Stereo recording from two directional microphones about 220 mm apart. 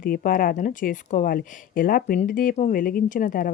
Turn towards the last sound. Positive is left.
turn(degrees=40)  # may be behind; listen again after turning